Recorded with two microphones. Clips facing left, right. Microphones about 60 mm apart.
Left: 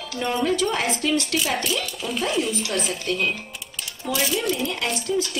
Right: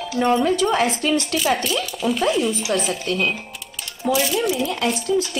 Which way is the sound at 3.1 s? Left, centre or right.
Right.